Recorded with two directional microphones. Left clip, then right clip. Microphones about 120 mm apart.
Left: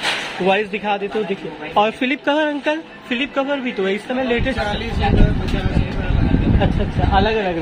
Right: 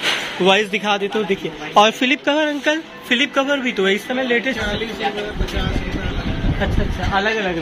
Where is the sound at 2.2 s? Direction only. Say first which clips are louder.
Left 3 dB; 25° left (ahead or behind).